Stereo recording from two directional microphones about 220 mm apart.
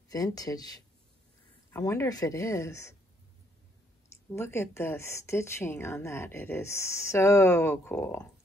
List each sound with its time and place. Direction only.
0.1 s speech: 15° left (ahead or behind)
4.3 s speech: 10° left (ahead or behind)